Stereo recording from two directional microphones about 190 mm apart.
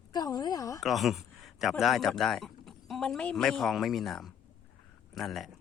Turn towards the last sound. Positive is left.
turn(degrees=0)  # may be behind; listen again after turning